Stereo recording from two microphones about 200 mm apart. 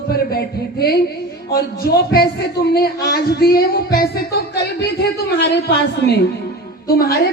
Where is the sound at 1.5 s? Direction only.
50° left (ahead or behind).